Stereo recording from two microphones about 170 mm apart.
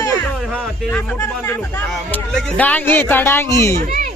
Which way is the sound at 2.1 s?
10° left (ahead or behind).